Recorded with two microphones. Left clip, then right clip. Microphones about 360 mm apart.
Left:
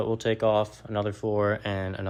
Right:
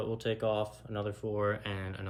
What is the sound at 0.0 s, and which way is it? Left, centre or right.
Speech, centre.